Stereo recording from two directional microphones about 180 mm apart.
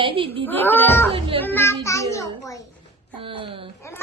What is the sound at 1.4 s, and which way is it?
Speech, 10° left (ahead or behind).